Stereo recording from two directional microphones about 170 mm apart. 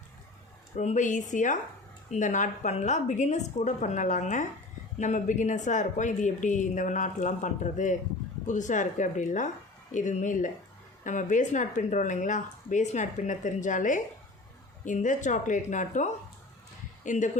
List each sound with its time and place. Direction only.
0.8 s speech: 45° left (ahead or behind)